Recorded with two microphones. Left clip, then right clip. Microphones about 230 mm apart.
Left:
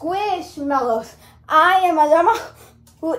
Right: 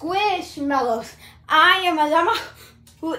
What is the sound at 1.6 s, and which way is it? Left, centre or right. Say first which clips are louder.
Speech: left 2 dB; centre.